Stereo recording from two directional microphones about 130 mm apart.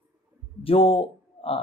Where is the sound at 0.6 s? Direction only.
45° left (ahead or behind).